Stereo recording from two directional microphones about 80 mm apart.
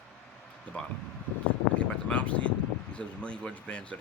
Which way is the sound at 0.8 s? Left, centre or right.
Centre.